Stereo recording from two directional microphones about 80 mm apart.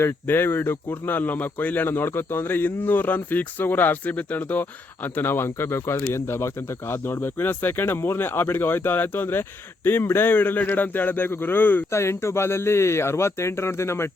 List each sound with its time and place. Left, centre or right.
0.0 s speech: left